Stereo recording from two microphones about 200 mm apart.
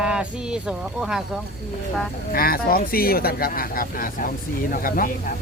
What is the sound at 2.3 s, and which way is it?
Speech, 50° left (ahead or behind).